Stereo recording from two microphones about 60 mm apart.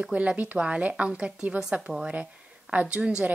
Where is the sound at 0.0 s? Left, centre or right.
Right.